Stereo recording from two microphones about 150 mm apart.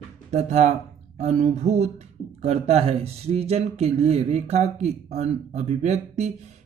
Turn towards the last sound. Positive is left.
turn(degrees=-50)  # may be behind; listen again after turning